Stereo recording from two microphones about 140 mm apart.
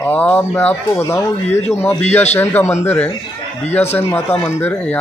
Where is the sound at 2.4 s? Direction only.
15° left (ahead or behind).